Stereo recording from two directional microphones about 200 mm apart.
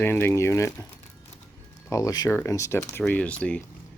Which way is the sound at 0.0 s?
10° left (ahead or behind).